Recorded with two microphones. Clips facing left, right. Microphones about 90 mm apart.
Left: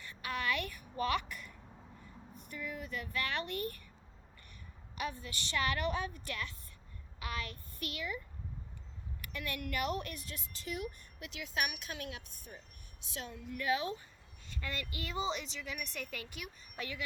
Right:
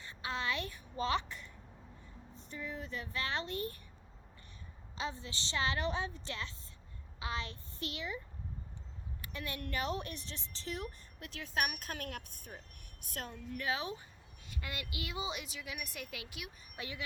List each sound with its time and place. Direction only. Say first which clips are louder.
0.0 s a sound: left 1 dB; 25° right (ahead or behind)
2.0 s speech: left 2 dB; 20° right (ahead or behind)
4.9 s a woman's voice: left 1 dB; 25° right (ahead or behind)
9.2 s a woman's voice: left 2 dB; 20° right (ahead or behind); by 13.3 s 50° right (ahead or behind)
13.6 s a woman's voice: left 3 dB; 20° right (ahead or behind)
14.5 s speech: left 2 dB; 10° right (ahead or behind)
16.7 s speech: left 2 dB; 20° right (ahead or behind)